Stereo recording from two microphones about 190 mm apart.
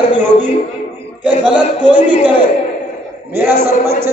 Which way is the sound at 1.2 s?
5° right (ahead or behind).